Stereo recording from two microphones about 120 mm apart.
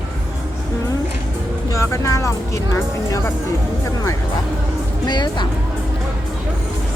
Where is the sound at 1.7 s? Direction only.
25° left (ahead or behind).